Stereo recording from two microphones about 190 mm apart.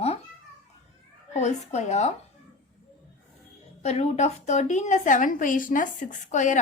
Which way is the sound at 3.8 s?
35° left (ahead or behind).